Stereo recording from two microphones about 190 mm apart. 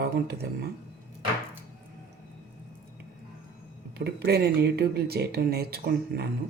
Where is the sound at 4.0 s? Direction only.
60° right (ahead or behind).